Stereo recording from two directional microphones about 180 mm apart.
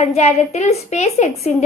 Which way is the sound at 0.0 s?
35° left (ahead or behind).